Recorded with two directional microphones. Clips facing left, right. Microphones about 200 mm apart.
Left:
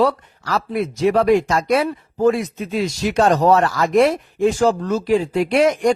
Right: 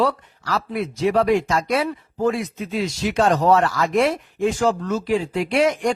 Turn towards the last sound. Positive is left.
turn(degrees=40)  # may be behind; listen again after turning